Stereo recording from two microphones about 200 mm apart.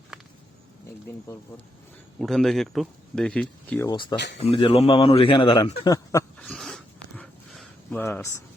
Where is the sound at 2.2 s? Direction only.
Centre (ahead or behind); by 5.7 s 25° left (ahead or behind).